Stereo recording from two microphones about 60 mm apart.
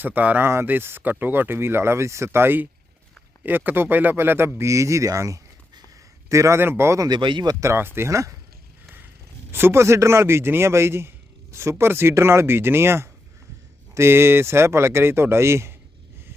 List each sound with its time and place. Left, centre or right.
0.0 s speech: right
0.4 s a man's voice: right
6.6 s speech: right
9.5 s speech: right